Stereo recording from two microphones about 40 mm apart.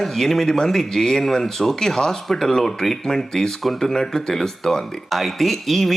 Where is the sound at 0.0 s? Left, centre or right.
Centre.